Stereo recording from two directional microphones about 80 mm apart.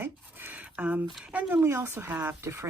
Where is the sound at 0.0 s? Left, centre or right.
Right.